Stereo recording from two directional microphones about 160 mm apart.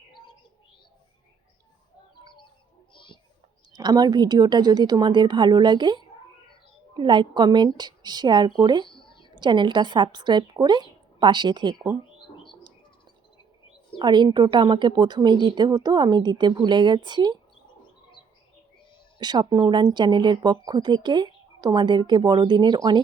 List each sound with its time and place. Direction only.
2.9 s a sound: 30° left (ahead or behind)
3.7 s speech: 25° right (ahead or behind)
14.0 s speech: 30° right (ahead or behind)
19.2 s speech: 25° right (ahead or behind)